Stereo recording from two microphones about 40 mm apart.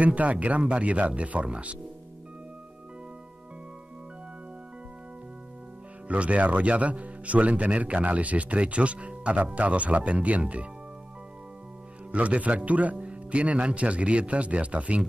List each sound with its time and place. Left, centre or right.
0.0 s speech: right
6.0 s speech: right
12.1 s speech: right
12.9 s speech: right